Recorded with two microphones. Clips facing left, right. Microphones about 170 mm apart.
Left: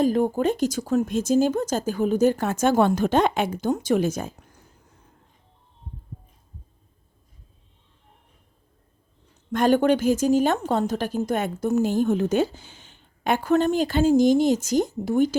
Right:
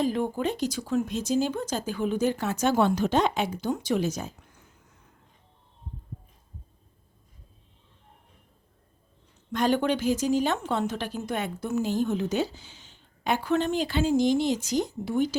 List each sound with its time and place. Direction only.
0.0 s a woman's voice: 45° left (ahead or behind)
9.5 s a woman's voice: 50° left (ahead or behind)